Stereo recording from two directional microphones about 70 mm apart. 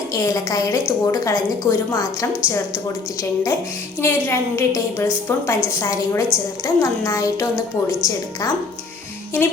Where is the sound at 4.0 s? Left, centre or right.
Left.